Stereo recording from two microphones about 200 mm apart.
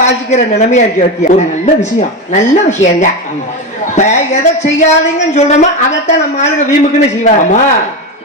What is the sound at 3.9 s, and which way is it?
A man's voice, 35° left (ahead or behind).